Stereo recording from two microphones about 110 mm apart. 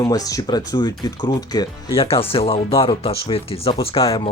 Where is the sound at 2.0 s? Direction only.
60° left (ahead or behind).